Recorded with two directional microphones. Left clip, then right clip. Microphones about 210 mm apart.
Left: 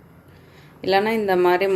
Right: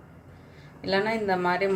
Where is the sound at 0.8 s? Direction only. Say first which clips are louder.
Left 6 dB; 40° left (ahead or behind).